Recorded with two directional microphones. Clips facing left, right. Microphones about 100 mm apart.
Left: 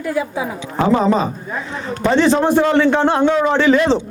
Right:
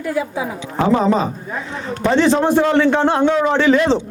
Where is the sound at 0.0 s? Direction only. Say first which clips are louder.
Left 1 dB; 25° left (ahead or behind).